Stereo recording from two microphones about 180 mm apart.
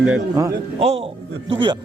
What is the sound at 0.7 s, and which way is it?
A man's voice, 35° right (ahead or behind).